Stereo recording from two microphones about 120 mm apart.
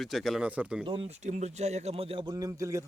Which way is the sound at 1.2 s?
75° right (ahead or behind).